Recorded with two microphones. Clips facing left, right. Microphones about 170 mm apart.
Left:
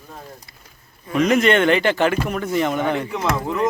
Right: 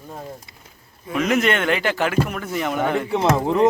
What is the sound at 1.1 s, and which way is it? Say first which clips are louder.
Speech: left 3 dB; 5° right (ahead or behind).